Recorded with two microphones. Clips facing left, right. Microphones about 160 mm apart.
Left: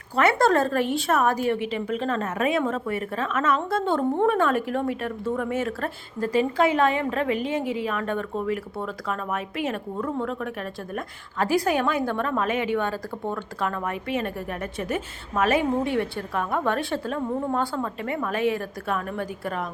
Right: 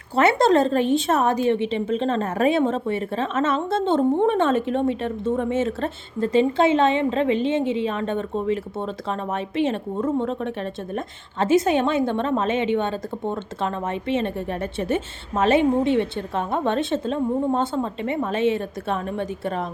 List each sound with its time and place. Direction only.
0.2 s a woman's voice: 25° right (ahead or behind)